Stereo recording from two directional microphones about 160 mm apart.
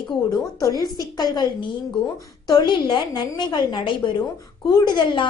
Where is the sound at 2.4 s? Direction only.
25° left (ahead or behind).